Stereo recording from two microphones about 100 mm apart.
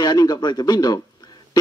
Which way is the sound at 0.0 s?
40° left (ahead or behind).